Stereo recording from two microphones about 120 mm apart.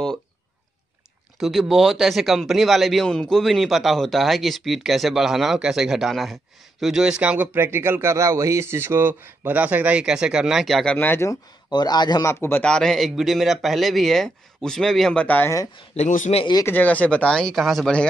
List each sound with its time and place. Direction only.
1.4 s a man's voice: centre (ahead or behind)
11.0 s speech: 20° left (ahead or behind)
11.7 s a man's voice: 35° left (ahead or behind)
12.3 s speech: 20° left (ahead or behind)
12.6 s a man's voice: 5° left (ahead or behind)
16.0 s speech: 80° left
16.6 s speech: 15° left (ahead or behind)